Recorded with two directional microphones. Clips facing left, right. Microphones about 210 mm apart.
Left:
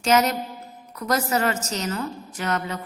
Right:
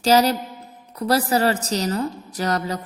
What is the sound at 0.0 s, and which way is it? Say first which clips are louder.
A woman's voice: right 3 dB; 35° right (ahead or behind).